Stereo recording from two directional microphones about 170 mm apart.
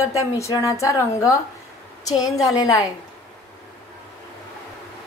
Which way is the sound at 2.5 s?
20° left (ahead or behind).